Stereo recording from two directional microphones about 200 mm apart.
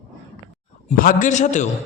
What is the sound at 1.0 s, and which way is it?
Speech, 45° left (ahead or behind).